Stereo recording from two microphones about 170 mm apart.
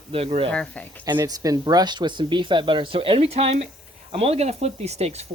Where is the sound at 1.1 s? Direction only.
25° right (ahead or behind).